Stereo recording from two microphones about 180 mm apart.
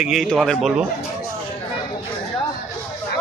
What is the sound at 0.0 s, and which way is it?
Speech, centre (ahead or behind).